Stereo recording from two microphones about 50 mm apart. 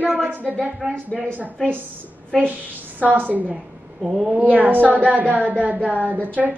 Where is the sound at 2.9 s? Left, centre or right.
Right.